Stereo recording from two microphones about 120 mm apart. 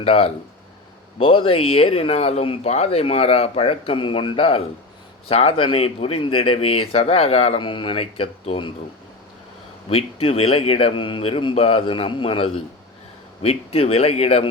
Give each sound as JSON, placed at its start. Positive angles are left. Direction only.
{"t": 0.0, "sound": "speech", "side_deg": 55}
{"t": 9.9, "sound": "speech", "side_deg": 55}